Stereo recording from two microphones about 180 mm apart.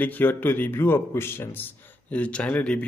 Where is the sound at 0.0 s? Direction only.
10° left (ahead or behind).